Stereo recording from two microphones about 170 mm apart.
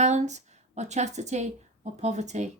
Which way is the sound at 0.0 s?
45° right (ahead or behind).